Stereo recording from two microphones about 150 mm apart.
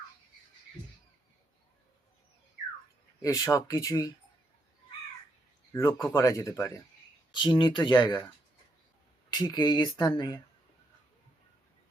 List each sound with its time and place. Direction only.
3.2 s speech: 20° left (ahead or behind)
5.7 s speech: 20° left (ahead or behind)
7.3 s speech: 30° left (ahead or behind)
9.3 s speech: 30° left (ahead or behind)